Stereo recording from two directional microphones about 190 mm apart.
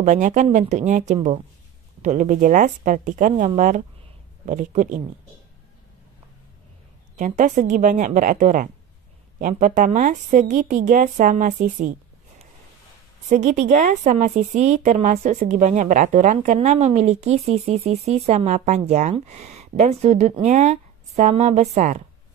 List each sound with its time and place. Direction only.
0.0 s a woman's voice: 40° right (ahead or behind)
7.2 s a woman's voice: 40° right (ahead or behind)
13.3 s a woman's voice: 40° right (ahead or behind)